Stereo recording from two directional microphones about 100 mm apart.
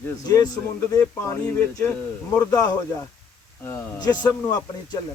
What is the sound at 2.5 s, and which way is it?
Speech, 40° left (ahead or behind).